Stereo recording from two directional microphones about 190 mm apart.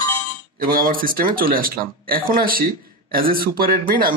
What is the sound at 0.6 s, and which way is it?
Speech, 50° right (ahead or behind).